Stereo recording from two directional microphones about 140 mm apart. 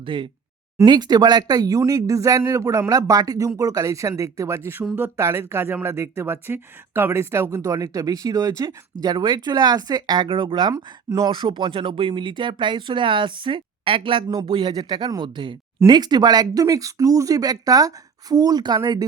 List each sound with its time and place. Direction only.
0.0 s speech: 40° right (ahead or behind)